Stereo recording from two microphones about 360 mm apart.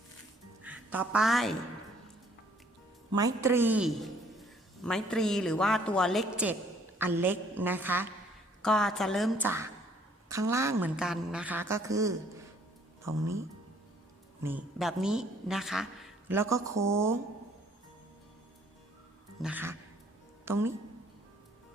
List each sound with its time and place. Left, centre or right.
0.6 s a woman's voice: centre
3.2 s a man's voice: centre
14.4 s a man's voice: centre
19.4 s a man's voice: centre